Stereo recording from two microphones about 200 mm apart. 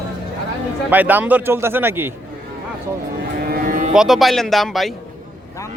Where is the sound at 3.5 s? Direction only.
45° right (ahead or behind).